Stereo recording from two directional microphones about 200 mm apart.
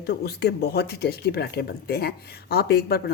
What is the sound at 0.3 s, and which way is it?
Speech, 55° left (ahead or behind).